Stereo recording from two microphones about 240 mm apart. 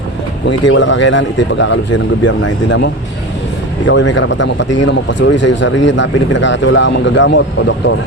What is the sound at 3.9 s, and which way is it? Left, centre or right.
Speech, left.